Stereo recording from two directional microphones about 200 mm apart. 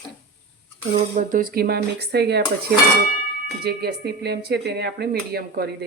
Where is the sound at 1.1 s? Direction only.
45° right (ahead or behind).